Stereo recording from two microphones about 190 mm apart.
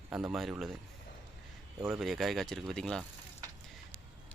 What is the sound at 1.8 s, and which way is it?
Speech, centre (ahead or behind).